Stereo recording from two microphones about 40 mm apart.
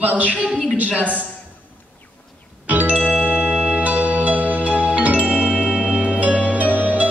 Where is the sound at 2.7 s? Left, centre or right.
Right.